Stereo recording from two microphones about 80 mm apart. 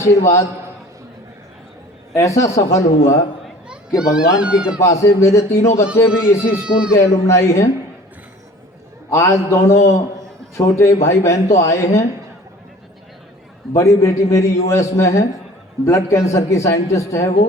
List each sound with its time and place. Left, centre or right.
0.0 s speech: left
2.1 s speech: left
3.7 s a child's voice: centre
4.8 s speech: left
6.6 s speech: centre
6.9 s speech: left
9.0 s speech: left
13.7 s speech: left